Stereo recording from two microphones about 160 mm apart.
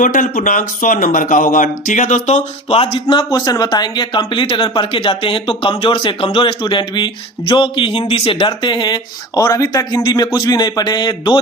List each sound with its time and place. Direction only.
0.0 s speech: 55° left (ahead or behind); by 11.3 s 25° left (ahead or behind)